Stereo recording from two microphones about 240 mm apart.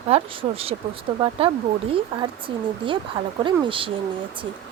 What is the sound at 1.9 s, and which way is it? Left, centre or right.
Speech, right.